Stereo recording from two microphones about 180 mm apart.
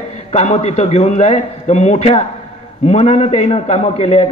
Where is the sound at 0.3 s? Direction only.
40° left (ahead or behind).